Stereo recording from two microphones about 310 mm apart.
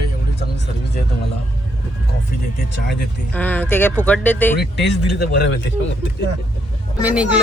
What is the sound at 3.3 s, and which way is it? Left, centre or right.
Speech, centre.